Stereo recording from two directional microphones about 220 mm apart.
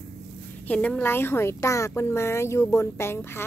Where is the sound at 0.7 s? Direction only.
5° left (ahead or behind).